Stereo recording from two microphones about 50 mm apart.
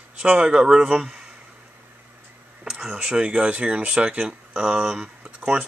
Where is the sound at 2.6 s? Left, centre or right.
Centre.